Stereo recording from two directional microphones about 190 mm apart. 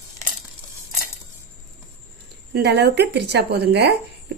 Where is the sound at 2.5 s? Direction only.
60° right (ahead or behind).